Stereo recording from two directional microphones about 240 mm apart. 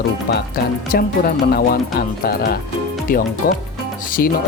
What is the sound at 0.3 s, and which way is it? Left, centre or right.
Speech, left.